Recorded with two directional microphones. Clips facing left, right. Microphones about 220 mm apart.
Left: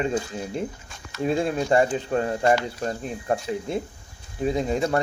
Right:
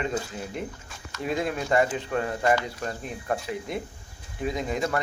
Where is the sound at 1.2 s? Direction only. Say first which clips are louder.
Left 5 dB; 30° left (ahead or behind).